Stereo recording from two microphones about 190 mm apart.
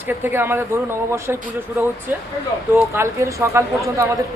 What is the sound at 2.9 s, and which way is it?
Speech, 15° right (ahead or behind).